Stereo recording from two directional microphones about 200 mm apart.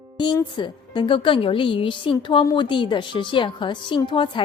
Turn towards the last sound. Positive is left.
turn(degrees=25)  # may be behind; listen again after turning